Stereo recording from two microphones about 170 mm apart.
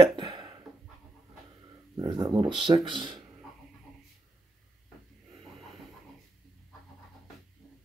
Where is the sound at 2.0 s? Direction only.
25° right (ahead or behind).